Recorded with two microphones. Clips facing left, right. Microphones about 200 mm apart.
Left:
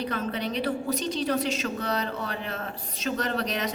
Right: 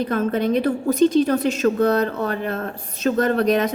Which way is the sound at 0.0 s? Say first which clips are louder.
Right 9 dB; 50° right (ahead or behind).